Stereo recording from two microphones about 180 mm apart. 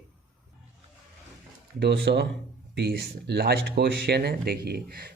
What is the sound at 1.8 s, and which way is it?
Speech, 65° right (ahead or behind).